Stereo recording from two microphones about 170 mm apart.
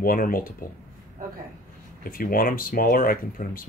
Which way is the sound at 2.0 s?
55° left (ahead or behind).